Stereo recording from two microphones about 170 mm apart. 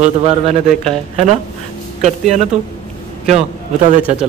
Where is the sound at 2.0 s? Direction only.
40° right (ahead or behind).